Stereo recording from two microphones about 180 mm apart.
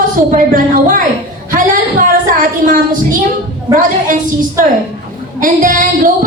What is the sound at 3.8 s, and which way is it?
A woman's voice, 50° right (ahead or behind).